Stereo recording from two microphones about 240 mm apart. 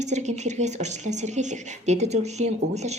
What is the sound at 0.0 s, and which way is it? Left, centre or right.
Speech, right.